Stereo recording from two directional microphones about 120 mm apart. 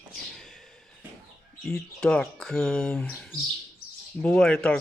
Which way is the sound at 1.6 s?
5° left (ahead or behind).